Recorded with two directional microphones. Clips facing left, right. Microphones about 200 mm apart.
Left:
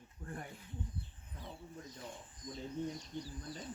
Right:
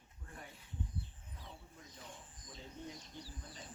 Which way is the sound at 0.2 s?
50° left (ahead or behind).